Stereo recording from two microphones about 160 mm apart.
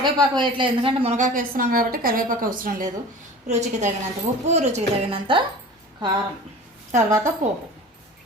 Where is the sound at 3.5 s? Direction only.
45° right (ahead or behind).